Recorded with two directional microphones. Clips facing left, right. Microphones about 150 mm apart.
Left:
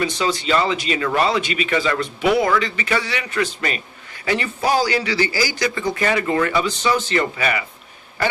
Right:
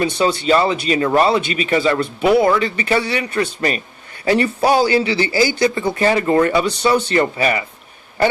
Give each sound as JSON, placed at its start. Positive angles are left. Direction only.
{"t": 0.0, "sound": "speech", "side_deg": -35}